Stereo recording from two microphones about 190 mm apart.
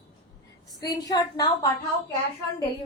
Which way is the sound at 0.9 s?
20° left (ahead or behind).